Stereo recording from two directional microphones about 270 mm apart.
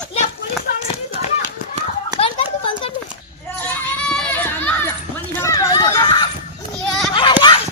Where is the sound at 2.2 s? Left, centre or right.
Centre.